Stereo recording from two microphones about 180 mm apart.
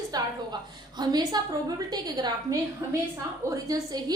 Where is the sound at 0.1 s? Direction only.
25° right (ahead or behind).